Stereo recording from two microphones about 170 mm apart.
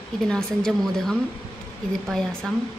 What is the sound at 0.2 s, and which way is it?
A woman's voice, 5° left (ahead or behind).